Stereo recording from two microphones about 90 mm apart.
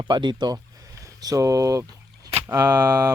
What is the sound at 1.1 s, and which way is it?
Speech, 40° right (ahead or behind).